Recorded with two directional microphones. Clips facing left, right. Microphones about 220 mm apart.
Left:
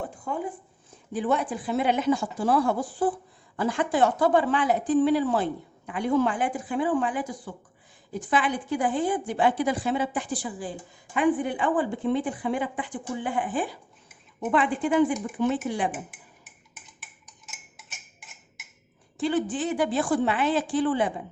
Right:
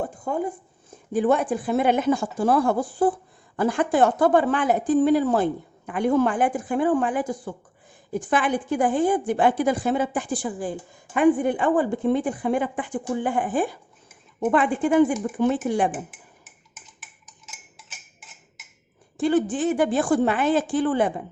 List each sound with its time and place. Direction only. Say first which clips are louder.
0.0 s a sound: right 5 dB; 45° right (ahead or behind)
1.1 s a woman's voice: right 5 dB; 50° right (ahead or behind)
19.1 s a woman's voice: right 5 dB; 45° right (ahead or behind)